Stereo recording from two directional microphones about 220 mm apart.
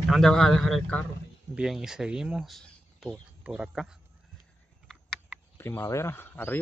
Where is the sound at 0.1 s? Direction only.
Centre (ahead or behind).